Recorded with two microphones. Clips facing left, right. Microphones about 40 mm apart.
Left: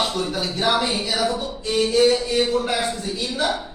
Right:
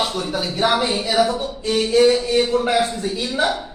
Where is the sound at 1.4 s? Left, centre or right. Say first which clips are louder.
Right 1 dB; right.